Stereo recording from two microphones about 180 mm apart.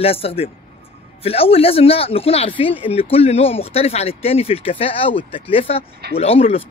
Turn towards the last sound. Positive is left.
turn(degrees=35)  # may be behind; listen again after turning